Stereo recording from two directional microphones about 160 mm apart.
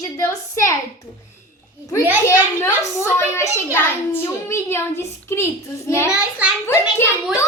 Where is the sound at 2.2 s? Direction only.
15° left (ahead or behind).